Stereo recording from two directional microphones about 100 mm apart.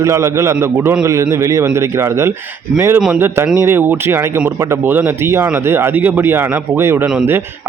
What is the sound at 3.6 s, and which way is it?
Speech, 20° right (ahead or behind).